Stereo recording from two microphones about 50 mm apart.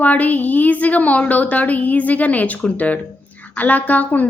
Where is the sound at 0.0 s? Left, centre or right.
Left.